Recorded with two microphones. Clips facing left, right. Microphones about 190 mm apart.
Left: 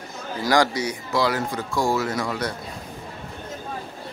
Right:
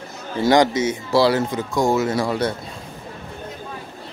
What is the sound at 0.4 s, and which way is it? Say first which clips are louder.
Speech: right 5 dB; 20° right (ahead or behind).